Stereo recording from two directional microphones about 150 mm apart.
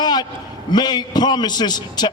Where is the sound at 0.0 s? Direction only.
30° left (ahead or behind).